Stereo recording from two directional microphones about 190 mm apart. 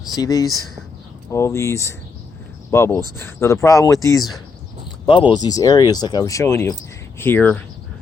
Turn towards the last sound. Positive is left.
turn(degrees=10)  # may be behind; listen again after turning